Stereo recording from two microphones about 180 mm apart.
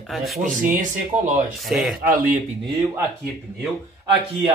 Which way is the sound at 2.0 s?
50° right (ahead or behind).